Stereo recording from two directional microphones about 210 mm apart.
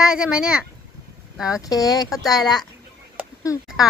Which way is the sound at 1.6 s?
15° left (ahead or behind).